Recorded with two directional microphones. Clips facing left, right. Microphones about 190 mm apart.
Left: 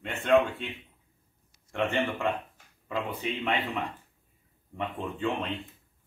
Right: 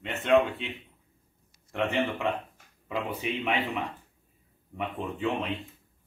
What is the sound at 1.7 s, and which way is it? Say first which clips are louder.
Speech: even; centre (ahead or behind).